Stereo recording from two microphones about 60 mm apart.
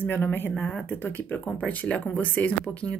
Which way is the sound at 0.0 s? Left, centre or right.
Left.